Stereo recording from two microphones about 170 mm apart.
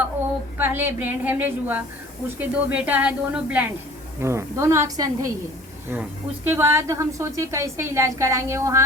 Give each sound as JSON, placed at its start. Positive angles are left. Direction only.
{"t": 0.6, "sound": "speech", "side_deg": -10}